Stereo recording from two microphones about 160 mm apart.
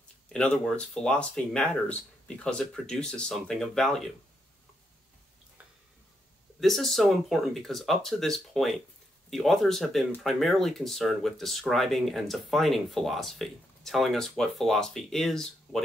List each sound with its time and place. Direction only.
0.3 s speech: 5° left (ahead or behind)
6.6 s speech: centre (ahead or behind)